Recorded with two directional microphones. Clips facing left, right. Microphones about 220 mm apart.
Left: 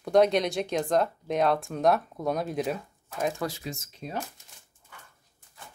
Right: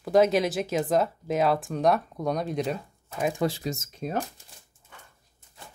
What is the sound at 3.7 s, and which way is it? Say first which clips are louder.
Speech: right 5 dB; 45° right (ahead or behind).